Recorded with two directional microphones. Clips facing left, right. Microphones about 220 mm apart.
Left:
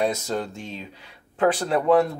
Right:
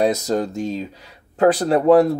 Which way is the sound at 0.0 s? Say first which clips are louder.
Right 6 dB; 40° right (ahead or behind).